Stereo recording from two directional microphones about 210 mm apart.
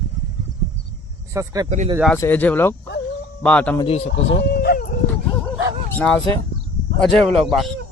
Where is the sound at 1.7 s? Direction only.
35° right (ahead or behind).